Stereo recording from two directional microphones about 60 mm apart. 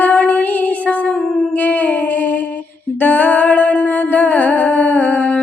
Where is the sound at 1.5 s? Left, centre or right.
Left.